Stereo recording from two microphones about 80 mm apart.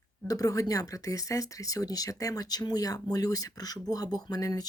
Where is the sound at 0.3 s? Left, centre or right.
Left.